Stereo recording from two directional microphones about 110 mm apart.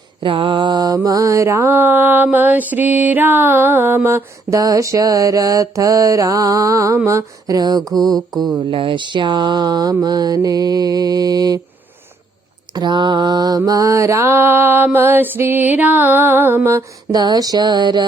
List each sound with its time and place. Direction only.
0.2 s mantra: 50° right (ahead or behind)
8.7 s speech: 50° right (ahead or behind)
10.0 s mantra: 35° right (ahead or behind)
12.7 s mantra: 40° right (ahead or behind); by 16.8 s 20° right (ahead or behind)
17.1 s mantra: 35° right (ahead or behind)